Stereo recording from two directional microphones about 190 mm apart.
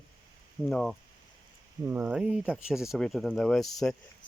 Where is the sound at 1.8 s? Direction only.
10° right (ahead or behind).